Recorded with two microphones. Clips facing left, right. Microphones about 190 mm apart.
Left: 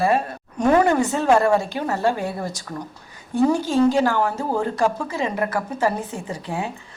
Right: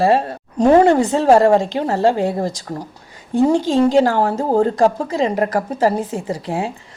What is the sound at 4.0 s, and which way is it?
Speech, 35° right (ahead or behind).